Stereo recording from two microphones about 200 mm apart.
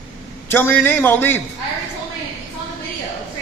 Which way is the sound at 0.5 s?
10° left (ahead or behind).